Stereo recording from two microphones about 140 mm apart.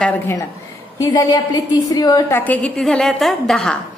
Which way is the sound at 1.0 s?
30° left (ahead or behind).